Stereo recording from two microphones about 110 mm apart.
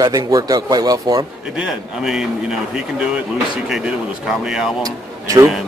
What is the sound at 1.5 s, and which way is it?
Speech, 5° right (ahead or behind).